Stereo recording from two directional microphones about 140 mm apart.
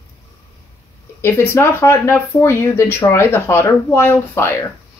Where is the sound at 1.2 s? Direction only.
15° left (ahead or behind).